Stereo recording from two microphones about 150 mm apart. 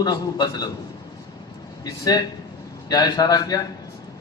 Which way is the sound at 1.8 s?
25° left (ahead or behind).